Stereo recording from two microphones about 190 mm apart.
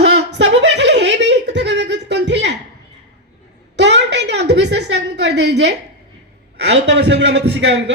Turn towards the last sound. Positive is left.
turn(degrees=-70)  # may be behind; listen again after turning